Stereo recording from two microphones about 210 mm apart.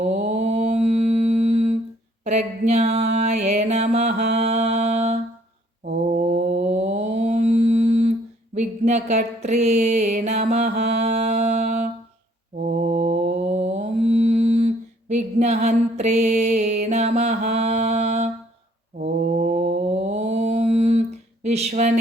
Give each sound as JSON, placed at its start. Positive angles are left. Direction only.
{"t": 0.3, "sound": "mantra", "side_deg": -30}
{"t": 8.5, "sound": "a sound", "side_deg": -35}
{"t": 12.6, "sound": "mantra", "side_deg": -40}
{"t": 15.4, "sound": "music", "side_deg": -35}
{"t": 18.9, "sound": "mantra", "side_deg": -40}
{"t": 21.4, "sound": "a sound", "side_deg": -30}